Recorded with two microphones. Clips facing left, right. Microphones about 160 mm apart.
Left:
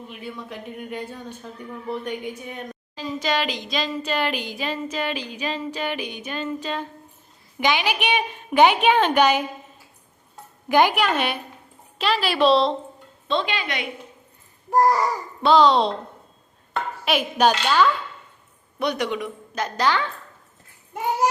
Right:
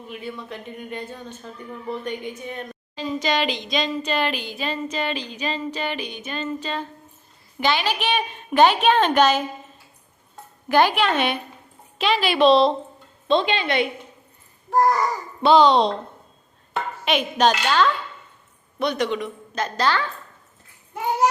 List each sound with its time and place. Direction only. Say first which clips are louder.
0.2 s a woman's voice: even; 10° left (ahead or behind)
10.7 s a woman's voice: even; 15° left (ahead or behind)
13.2 s speech: right 5 dB; 20° right (ahead or behind)
14.7 s a woman's voice: left 1 dB; 10° left (ahead or behind)
15.4 s a woman's voice: right 1 dB; centre (ahead or behind)
17.1 s a woman's voice: even; 5° left (ahead or behind)